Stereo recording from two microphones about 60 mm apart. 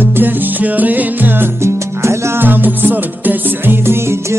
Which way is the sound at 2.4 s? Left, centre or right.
Right.